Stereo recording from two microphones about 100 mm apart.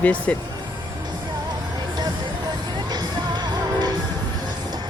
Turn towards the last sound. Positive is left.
turn(degrees=-45)  # may be behind; listen again after turning